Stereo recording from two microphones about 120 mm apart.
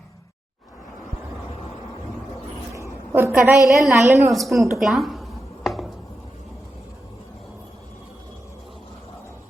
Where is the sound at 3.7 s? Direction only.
Centre (ahead or behind).